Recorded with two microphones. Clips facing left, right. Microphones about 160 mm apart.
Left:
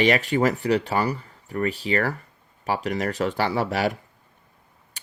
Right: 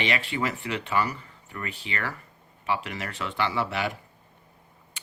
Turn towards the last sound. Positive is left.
turn(degrees=40)  # may be behind; listen again after turning